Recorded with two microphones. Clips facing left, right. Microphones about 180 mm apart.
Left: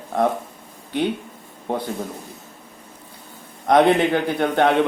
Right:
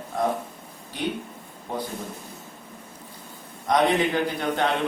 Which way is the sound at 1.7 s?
75° left (ahead or behind).